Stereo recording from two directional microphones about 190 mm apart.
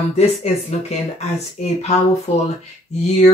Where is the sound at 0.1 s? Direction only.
35° left (ahead or behind).